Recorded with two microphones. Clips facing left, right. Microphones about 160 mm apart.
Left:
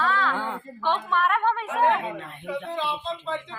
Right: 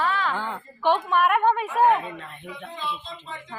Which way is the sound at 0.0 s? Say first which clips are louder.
Even; 15° right (ahead or behind).